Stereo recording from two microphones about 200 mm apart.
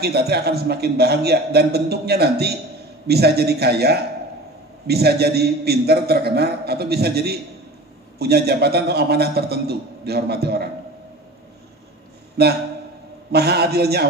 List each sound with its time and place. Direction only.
0.0 s a man's voice: 55° right (ahead or behind)
12.4 s a man's voice: 55° right (ahead or behind)